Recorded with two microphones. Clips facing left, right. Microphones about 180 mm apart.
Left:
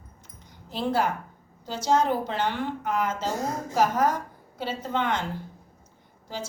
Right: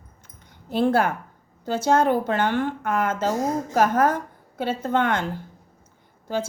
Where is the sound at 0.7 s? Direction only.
55° right (ahead or behind).